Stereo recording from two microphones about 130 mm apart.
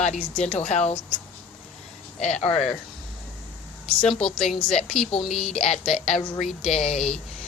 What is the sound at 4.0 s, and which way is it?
A woman's voice, 5° left (ahead or behind).